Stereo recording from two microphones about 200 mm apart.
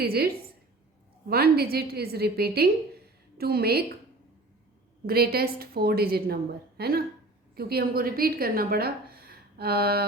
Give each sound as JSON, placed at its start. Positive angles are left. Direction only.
{"t": 0.0, "sound": "a woman's voice", "side_deg": -50}
{"t": 1.3, "sound": "a woman's voice", "side_deg": -50}
{"t": 5.0, "sound": "a woman's voice", "side_deg": -50}